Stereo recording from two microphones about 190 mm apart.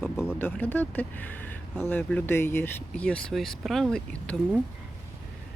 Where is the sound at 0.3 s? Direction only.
10° left (ahead or behind).